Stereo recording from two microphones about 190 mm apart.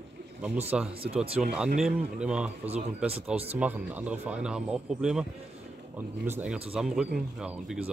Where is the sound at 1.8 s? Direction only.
5° right (ahead or behind).